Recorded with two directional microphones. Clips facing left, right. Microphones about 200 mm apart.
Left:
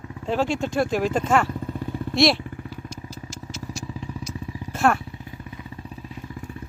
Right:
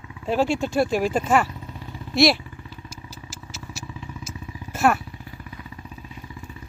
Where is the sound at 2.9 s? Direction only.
5° right (ahead or behind).